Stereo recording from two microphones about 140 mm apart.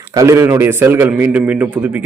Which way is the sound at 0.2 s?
20° right (ahead or behind).